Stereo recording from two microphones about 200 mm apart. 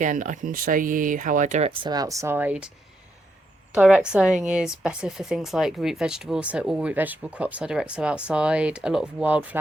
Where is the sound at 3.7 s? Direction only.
5° right (ahead or behind).